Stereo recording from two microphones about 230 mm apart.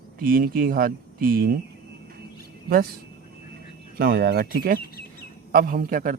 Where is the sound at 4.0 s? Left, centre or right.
Right.